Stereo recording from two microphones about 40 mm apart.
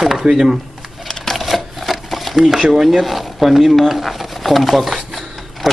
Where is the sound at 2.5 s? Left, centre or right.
Centre.